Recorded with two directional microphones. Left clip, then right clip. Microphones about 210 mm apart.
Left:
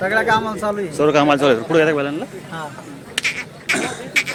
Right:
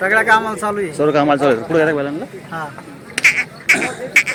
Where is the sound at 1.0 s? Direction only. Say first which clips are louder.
Even; centre (ahead or behind).